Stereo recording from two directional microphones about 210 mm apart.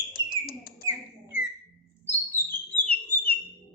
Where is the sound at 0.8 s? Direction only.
15° right (ahead or behind).